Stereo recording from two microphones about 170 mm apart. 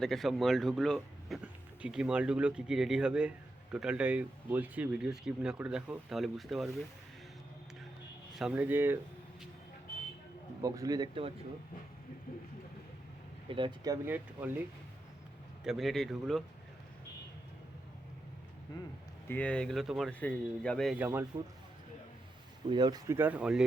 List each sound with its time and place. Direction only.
0.0 s speech: centre (ahead or behind)
8.4 s speech: 5° right (ahead or behind)
10.6 s speech: 20° right (ahead or behind)
13.5 s speech: 30° right (ahead or behind)
14.1 s speech: 10° right (ahead or behind)
15.6 s speech: centre (ahead or behind)
19.3 s speech: 5° left (ahead or behind)
21.0 s speech: 10° right (ahead or behind)
22.7 s speech: 25° right (ahead or behind); by 23.6 s 5° right (ahead or behind)